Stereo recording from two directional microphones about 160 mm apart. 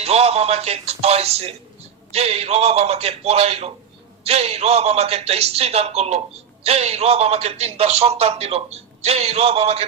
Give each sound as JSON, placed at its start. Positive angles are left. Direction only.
{"t": 0.0, "sound": "a man's voice", "side_deg": -40}